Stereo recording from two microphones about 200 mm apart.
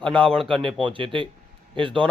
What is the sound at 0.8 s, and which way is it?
Speech, 25° right (ahead or behind).